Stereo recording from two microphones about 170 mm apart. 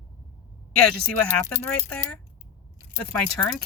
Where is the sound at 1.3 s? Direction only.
10° left (ahead or behind).